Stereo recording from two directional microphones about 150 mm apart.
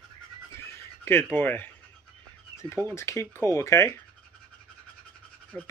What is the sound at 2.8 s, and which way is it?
Speech, 20° left (ahead or behind).